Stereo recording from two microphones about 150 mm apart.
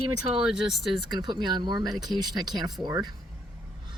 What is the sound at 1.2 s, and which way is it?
Speech, 30° right (ahead or behind).